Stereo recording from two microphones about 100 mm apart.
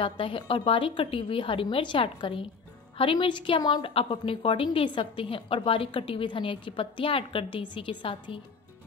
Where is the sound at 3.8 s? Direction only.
65° left (ahead or behind).